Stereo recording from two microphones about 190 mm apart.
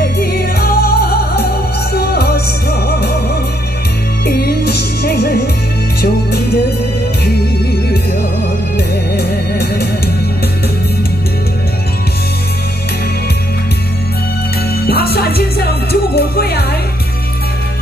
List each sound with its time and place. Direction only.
0.2 s music: 55° left (ahead or behind)
4.3 s music: 55° left (ahead or behind)
8.7 s music: 55° left (ahead or behind)
14.9 s music: 55° left (ahead or behind)